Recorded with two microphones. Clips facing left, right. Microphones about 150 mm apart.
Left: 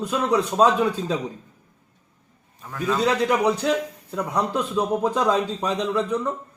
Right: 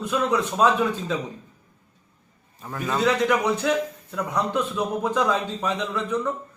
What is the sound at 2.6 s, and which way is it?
Speech, 5° right (ahead or behind).